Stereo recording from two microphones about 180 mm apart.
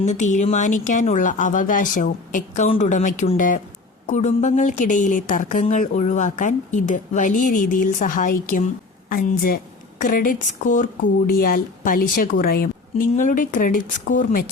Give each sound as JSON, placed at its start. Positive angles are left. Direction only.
{"t": 0.0, "sound": "speech", "side_deg": 40}